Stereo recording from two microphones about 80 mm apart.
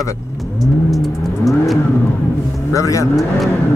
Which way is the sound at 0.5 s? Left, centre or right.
Centre.